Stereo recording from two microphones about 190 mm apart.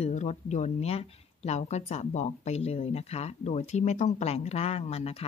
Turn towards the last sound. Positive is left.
turn(degrees=30)  # may be behind; listen again after turning